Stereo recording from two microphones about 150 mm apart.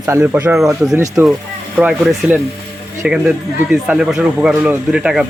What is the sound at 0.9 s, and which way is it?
Speech, 20° right (ahead or behind).